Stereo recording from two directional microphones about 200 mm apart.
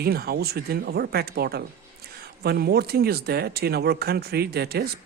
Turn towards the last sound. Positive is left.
turn(degrees=-50)  # may be behind; listen again after turning